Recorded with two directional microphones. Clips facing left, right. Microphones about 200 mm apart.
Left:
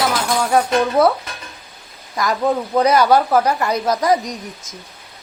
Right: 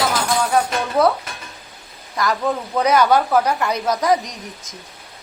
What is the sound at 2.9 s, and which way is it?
Speech, 40° left (ahead or behind).